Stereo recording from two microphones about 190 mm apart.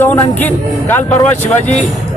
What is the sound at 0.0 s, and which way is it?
Speech, 10° left (ahead or behind).